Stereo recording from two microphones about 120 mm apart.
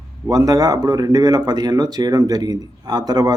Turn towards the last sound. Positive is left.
turn(degrees=-35)  # may be behind; listen again after turning